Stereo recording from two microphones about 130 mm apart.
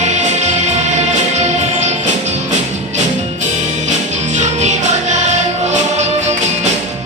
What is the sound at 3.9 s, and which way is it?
Music, 65° right (ahead or behind).